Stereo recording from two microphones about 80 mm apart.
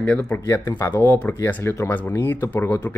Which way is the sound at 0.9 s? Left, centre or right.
Left.